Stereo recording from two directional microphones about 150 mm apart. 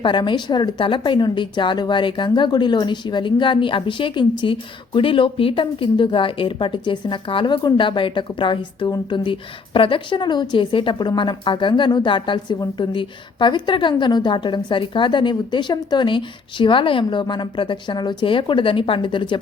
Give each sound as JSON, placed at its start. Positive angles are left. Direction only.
{"t": 0.0, "sound": "a woman's voice", "side_deg": 30}